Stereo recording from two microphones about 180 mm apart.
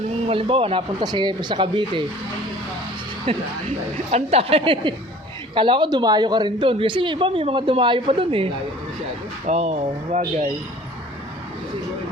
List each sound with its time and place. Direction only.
0.3 s speech: 30° right (ahead or behind)
3.3 s speech: 30° right (ahead or behind)
9.5 s speech: 35° right (ahead or behind)